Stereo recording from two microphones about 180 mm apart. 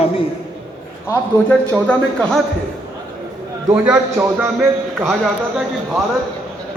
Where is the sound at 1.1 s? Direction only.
10° left (ahead or behind).